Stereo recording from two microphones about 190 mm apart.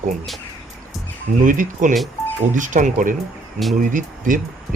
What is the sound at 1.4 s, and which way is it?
Speech, 45° right (ahead or behind).